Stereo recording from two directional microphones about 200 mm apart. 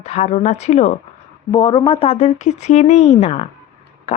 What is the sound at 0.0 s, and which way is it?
A woman's voice, 35° left (ahead or behind).